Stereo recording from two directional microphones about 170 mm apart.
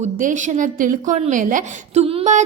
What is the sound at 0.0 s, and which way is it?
A woman's voice, 50° right (ahead or behind).